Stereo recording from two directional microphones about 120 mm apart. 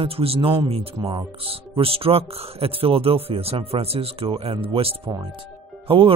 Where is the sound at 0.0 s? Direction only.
50° right (ahead or behind).